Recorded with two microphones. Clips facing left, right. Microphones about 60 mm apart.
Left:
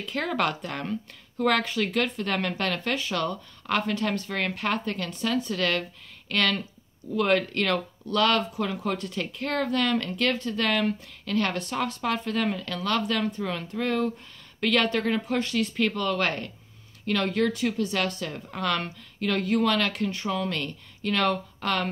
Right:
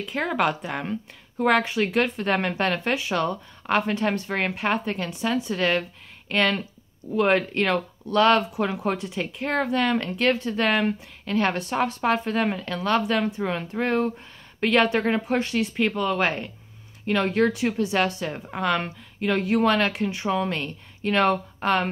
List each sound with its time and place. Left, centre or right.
0.0 s a woman's voice: centre; by 8.9 s right
8.9 s a woman's voice: centre
19.6 s a woman's voice: right